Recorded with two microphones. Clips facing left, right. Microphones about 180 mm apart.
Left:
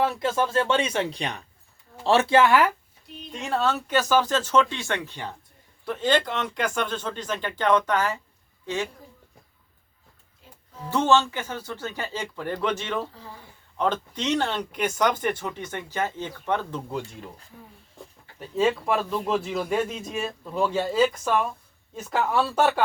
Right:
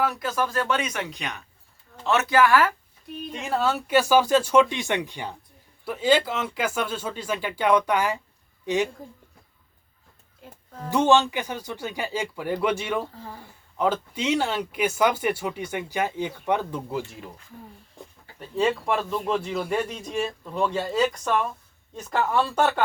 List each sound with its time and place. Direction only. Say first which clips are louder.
0.0 s speech: left 2 dB; 25° left (ahead or behind)
3.3 s speech: even; 5° right (ahead or behind)
10.4 s music: right 7 dB; 55° right (ahead or behind)
10.9 s speech: right 2 dB; 15° right (ahead or behind)
18.3 s a man's voice: left 1 dB; centre (ahead or behind)